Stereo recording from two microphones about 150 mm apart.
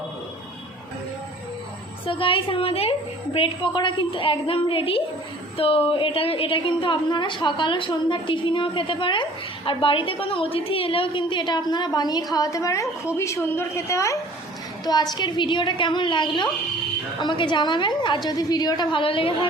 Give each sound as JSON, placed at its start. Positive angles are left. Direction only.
{"t": 2.0, "sound": "a woman's voice", "side_deg": 35}